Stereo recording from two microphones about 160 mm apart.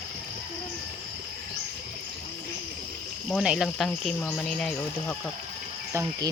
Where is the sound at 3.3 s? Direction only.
5° right (ahead or behind).